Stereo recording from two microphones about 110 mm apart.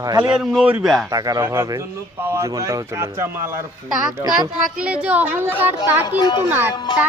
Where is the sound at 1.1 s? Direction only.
35° right (ahead or behind).